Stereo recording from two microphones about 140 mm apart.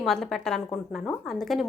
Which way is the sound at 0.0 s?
Centre (ahead or behind).